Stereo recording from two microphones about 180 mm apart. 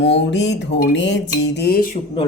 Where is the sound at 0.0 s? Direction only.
90° left; by 2.0 s 55° left (ahead or behind).